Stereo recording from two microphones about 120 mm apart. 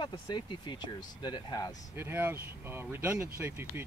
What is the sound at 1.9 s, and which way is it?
Speech, 15° right (ahead or behind).